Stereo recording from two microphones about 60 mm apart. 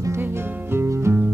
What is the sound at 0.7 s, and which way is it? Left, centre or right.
Music, right.